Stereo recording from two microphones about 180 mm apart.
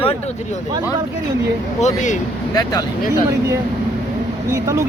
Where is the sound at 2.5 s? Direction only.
20° left (ahead or behind).